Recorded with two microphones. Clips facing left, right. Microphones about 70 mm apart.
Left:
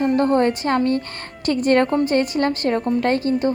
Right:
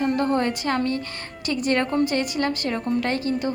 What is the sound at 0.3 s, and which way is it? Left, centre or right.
A woman's voice, left.